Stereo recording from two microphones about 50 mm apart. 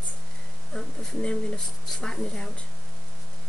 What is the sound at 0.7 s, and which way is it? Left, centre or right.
Speech, centre.